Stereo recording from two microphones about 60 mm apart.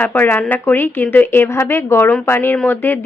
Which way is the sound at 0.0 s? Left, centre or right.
Left.